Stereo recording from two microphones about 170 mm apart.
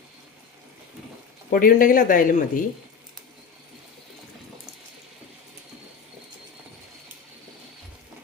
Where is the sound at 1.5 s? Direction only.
55° left (ahead or behind).